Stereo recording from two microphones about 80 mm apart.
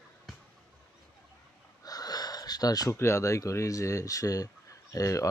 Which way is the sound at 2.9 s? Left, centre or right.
Left.